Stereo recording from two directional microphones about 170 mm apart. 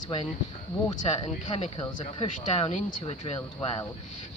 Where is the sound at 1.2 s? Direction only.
40° left (ahead or behind).